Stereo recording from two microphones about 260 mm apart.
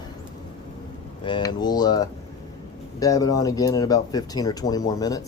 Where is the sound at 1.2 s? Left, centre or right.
Centre.